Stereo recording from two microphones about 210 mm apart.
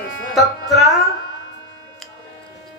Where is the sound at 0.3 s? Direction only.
Centre (ahead or behind).